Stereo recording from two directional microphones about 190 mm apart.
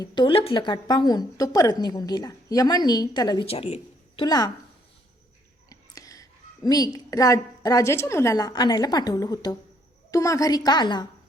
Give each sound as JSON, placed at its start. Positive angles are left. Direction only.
{"t": 0.0, "sound": "a woman's voice", "side_deg": 25}
{"t": 4.2, "sound": "a woman's voice", "side_deg": 20}
{"t": 5.6, "sound": "a woman's voice", "side_deg": 20}